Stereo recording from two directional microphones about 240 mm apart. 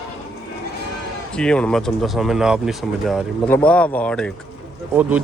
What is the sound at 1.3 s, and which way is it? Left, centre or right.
Speech, centre.